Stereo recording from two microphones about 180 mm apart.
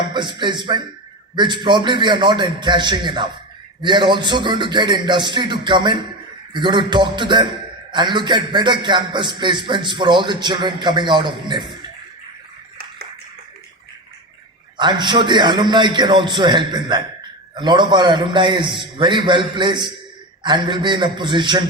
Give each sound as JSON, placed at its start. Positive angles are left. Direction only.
{"t": 0.0, "sound": "a man's voice", "side_deg": -25}
{"t": 14.8, "sound": "a man's voice", "side_deg": -25}